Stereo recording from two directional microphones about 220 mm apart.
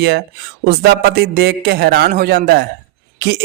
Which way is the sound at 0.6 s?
45° right (ahead or behind).